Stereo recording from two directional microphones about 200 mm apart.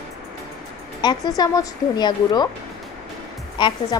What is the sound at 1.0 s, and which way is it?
A woman's voice, 20° left (ahead or behind).